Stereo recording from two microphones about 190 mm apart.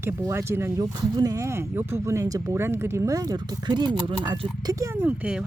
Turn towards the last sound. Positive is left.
turn(degrees=-5)  # may be behind; listen again after turning